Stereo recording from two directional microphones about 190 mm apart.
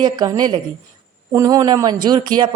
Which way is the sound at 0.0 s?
20° right (ahead or behind).